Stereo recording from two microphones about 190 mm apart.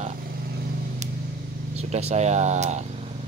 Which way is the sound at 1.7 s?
35° right (ahead or behind).